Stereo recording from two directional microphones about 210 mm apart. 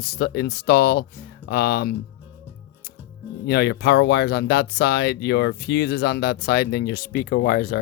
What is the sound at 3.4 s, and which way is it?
Speech, 50° left (ahead or behind).